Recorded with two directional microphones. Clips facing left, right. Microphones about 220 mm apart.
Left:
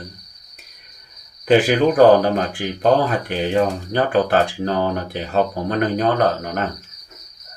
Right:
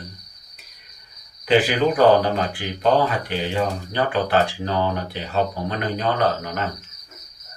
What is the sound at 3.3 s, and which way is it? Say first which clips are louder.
Speech: left 5 dB; 45° left (ahead or behind).